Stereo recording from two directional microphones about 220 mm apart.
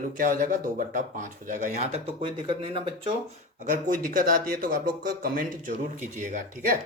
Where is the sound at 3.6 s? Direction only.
40° right (ahead or behind).